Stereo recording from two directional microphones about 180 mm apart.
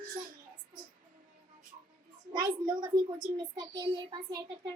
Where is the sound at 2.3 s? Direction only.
25° right (ahead or behind).